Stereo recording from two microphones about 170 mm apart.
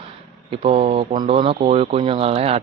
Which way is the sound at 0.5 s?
35° right (ahead or behind).